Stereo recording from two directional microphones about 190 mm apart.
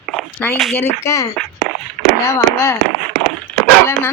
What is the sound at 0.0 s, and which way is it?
Speech, centre (ahead or behind).